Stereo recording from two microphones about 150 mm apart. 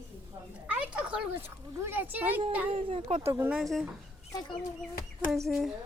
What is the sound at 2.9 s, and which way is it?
Speech, 40° right (ahead or behind).